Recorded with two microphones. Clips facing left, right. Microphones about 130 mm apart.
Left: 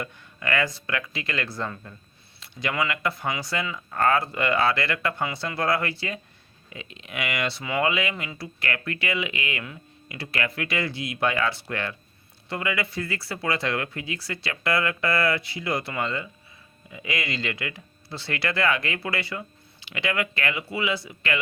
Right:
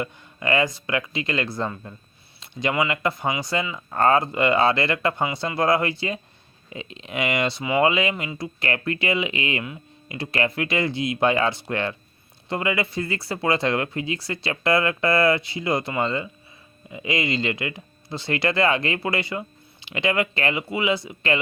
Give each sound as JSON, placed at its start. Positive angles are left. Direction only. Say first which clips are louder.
{"t": 0.0, "sound": "speech", "louder": "right 4 dB", "side_deg": -25}